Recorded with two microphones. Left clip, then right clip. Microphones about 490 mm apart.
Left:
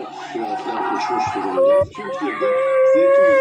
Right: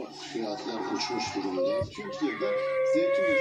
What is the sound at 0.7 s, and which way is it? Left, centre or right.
Speech, left.